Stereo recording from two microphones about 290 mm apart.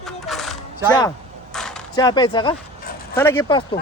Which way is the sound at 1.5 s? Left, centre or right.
Centre.